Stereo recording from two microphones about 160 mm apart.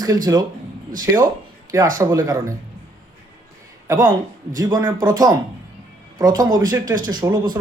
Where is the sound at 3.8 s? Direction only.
25° right (ahead or behind).